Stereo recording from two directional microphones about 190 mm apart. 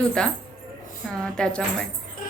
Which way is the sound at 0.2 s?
5° left (ahead or behind).